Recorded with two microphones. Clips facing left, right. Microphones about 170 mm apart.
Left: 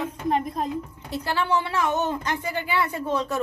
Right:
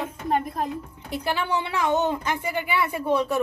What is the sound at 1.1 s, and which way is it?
A woman's voice, 15° right (ahead or behind).